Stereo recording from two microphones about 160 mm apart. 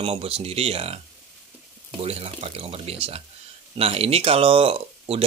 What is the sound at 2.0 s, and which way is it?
Speech, 40° right (ahead or behind).